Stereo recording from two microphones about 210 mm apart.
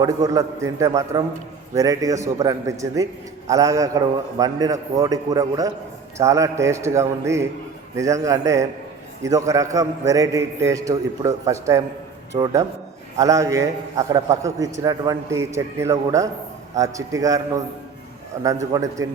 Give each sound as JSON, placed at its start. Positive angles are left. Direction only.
{"t": 0.0, "sound": "a man's voice", "side_deg": -15}